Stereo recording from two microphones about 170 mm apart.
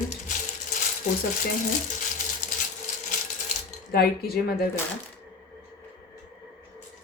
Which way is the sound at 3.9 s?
65° left (ahead or behind).